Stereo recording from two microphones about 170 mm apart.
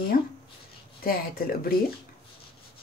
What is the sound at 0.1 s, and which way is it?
Speech, 55° left (ahead or behind).